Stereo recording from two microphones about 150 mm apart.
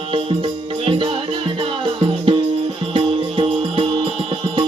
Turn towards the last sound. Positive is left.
turn(degrees=-35)  # may be behind; listen again after turning